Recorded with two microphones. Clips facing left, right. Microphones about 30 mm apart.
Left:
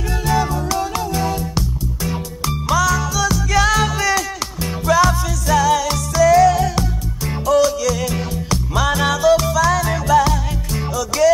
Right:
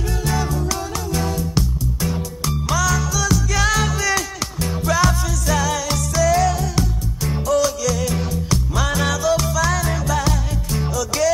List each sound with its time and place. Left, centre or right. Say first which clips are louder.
0.3 s music: left 5 dB; centre
2.7 s music: left 4 dB; centre